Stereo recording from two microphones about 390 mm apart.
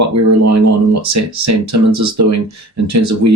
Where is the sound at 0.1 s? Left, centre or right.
Right.